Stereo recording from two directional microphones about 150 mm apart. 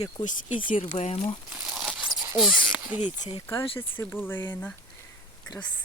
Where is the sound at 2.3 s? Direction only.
Centre (ahead or behind).